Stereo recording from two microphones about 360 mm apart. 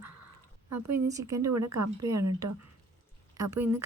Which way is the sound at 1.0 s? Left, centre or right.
Centre.